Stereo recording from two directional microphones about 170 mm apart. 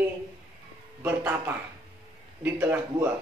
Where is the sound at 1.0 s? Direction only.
10° right (ahead or behind).